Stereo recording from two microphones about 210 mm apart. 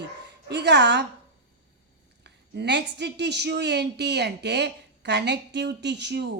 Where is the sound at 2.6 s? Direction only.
55° right (ahead or behind).